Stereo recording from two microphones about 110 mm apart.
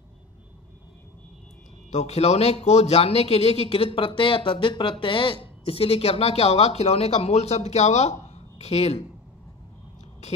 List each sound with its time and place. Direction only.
1.9 s a man's voice: 75° left (ahead or behind)